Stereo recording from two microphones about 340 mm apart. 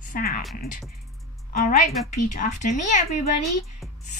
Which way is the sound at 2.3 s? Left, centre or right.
Left.